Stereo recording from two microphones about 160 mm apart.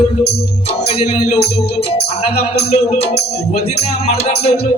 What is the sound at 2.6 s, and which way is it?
Music, 40° left (ahead or behind).